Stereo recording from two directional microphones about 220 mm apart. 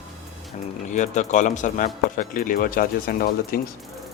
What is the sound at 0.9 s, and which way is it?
Speech, 35° left (ahead or behind).